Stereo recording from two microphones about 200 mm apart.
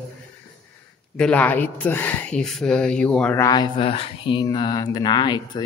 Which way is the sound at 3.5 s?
25° left (ahead or behind).